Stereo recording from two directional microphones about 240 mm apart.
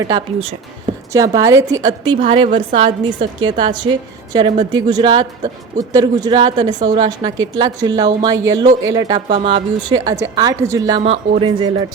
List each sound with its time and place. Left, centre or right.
0.0 s speech: centre